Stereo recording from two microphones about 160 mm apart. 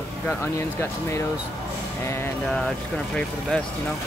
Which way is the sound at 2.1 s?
15° left (ahead or behind).